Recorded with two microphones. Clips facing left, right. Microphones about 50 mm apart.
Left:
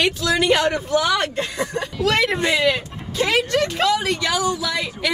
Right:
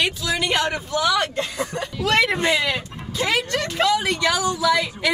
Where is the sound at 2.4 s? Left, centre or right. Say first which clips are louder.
Left 1 dB; right.